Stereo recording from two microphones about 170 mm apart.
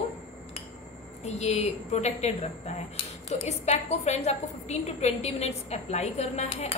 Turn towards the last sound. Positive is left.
turn(degrees=40)  # may be behind; listen again after turning